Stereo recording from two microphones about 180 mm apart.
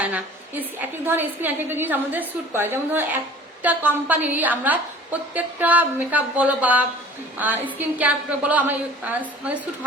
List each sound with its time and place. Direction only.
0.0 s a woman's voice: 10° right (ahead or behind)